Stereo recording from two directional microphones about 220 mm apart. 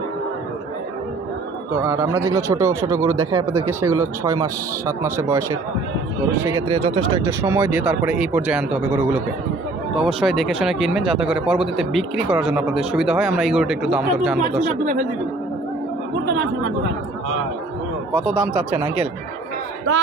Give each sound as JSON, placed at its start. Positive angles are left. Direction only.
{"t": 1.8, "sound": "speech", "side_deg": -10}
{"t": 14.6, "sound": "speech", "side_deg": -35}